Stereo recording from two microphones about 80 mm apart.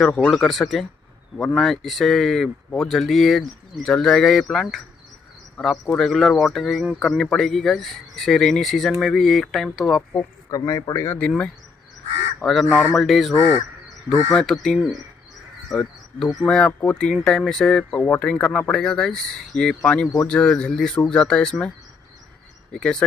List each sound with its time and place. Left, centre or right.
0.3 s speech: centre
10.1 s speech: left
11.1 s speech: centre
12.4 s speech: centre
17.9 s speech: left